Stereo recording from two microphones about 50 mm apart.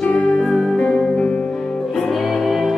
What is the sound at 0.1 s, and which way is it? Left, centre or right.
Music, left.